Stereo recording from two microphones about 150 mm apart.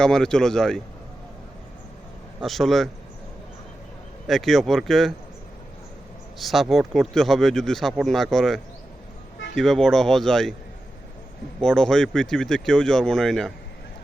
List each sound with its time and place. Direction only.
0.0 s speech: 5° left (ahead or behind)
2.4 s speech: centre (ahead or behind)
4.3 s speech: centre (ahead or behind)
6.4 s speech: centre (ahead or behind)
11.6 s speech: 5° left (ahead or behind)